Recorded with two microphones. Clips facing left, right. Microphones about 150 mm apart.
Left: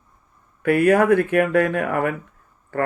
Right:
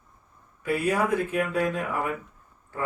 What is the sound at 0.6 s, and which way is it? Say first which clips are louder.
Speech: left 9 dB; 65° left (ahead or behind).